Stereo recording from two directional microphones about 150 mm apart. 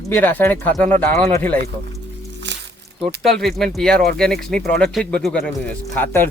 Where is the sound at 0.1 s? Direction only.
10° left (ahead or behind).